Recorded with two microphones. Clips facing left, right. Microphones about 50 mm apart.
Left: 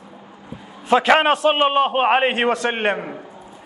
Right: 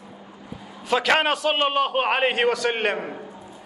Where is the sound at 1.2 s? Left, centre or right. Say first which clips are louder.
Left 5 dB; left.